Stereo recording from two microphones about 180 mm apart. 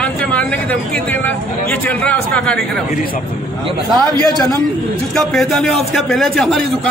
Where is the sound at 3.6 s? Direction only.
25° right (ahead or behind).